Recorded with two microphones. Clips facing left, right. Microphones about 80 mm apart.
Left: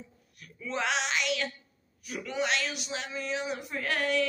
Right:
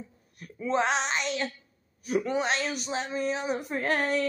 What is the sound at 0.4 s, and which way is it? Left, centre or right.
Speech, right.